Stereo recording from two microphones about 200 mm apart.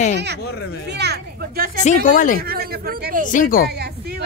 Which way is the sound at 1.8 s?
40° left (ahead or behind).